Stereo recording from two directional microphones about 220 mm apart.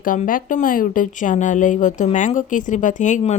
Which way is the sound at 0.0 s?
40° left (ahead or behind).